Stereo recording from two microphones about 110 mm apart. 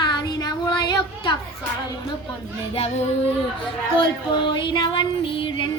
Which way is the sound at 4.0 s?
45° left (ahead or behind).